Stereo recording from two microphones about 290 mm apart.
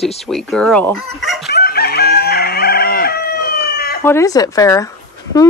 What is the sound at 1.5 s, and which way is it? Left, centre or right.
Chicken, left.